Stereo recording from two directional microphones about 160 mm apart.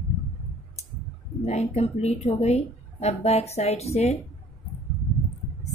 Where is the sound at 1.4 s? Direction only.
45° left (ahead or behind).